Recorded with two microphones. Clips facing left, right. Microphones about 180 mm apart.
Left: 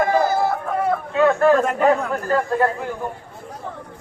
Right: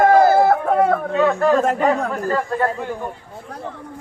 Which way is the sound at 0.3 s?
60° right (ahead or behind).